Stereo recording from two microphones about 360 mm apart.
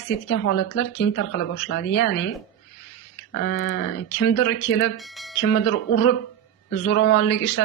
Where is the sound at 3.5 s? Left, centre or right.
Left.